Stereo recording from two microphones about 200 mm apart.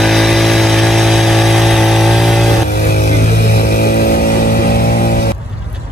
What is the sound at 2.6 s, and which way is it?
Vehicle, 50° left (ahead or behind).